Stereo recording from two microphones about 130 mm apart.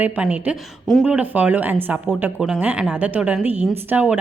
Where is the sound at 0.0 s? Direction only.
10° right (ahead or behind).